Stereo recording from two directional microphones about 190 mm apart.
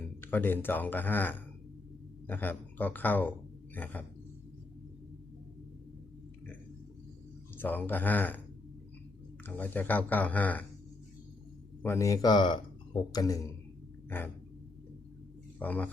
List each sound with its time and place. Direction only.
0.2 s speech: 10° left (ahead or behind)
7.5 s speech: 10° left (ahead or behind)
9.5 s speech: 10° left (ahead or behind)
11.8 s speech: 15° left (ahead or behind)
15.5 s a man's voice: 10° left (ahead or behind)